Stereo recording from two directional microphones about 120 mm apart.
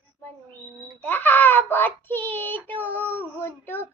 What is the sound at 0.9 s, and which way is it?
Child singing, 15° left (ahead or behind).